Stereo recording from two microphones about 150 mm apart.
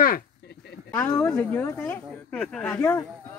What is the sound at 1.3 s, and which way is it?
Speech, 10° left (ahead or behind).